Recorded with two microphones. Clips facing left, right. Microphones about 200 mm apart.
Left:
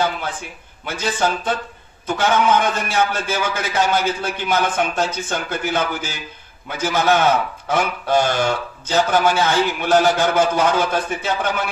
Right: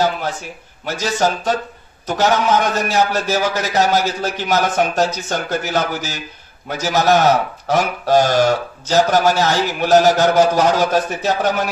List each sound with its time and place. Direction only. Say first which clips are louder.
0.8 s speech: right 3 dB; 40° right (ahead or behind)